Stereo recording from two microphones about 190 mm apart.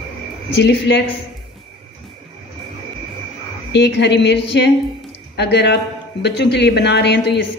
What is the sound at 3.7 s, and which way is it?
A man's voice, 65° left (ahead or behind).